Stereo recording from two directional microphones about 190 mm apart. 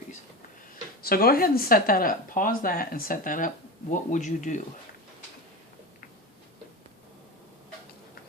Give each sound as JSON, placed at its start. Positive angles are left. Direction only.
{"t": 1.0, "sound": "speech", "side_deg": 50}